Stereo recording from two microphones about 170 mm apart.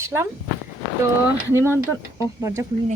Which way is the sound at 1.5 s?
15° right (ahead or behind).